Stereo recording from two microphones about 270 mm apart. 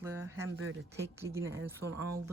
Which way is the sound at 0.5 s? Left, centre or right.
Right.